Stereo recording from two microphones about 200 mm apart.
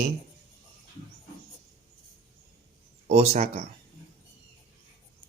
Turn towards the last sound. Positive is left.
turn(degrees=-35)  # may be behind; listen again after turning